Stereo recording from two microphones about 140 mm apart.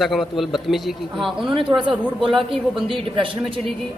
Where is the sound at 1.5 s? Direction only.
35° right (ahead or behind).